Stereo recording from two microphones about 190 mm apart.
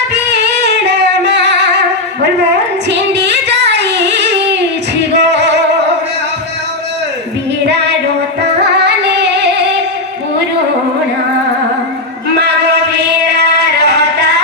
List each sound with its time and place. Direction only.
0.1 s singing: 65° right (ahead or behind)
2.5 s female singing: 65° right (ahead or behind)
5.1 s music: 65° right (ahead or behind)
7.7 s music: 65° right (ahead or behind)
12.9 s music: 60° right (ahead or behind)